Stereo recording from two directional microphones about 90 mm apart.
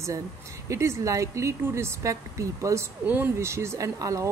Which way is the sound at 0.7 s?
35° right (ahead or behind).